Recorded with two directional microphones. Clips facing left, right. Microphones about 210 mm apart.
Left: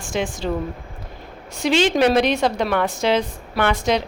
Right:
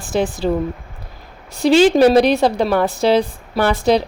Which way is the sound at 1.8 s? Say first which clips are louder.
Right 5 dB; 35° right (ahead or behind).